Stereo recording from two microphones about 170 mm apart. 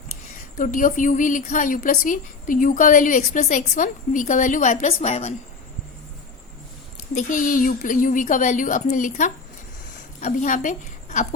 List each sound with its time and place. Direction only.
0.5 s a woman's voice: 50° left (ahead or behind)
7.1 s a woman's voice: 50° left (ahead or behind)